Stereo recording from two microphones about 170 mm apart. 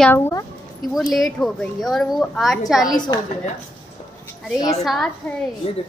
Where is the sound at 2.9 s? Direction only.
25° left (ahead or behind).